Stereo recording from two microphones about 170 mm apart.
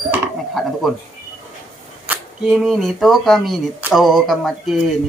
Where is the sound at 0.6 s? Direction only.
Centre (ahead or behind).